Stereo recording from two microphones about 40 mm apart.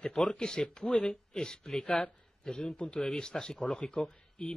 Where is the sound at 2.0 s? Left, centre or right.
Left.